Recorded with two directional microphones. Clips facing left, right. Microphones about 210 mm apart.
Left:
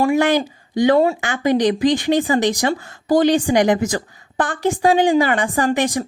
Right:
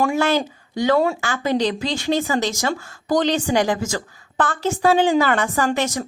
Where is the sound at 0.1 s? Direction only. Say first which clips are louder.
Left 3 dB; 15° left (ahead or behind).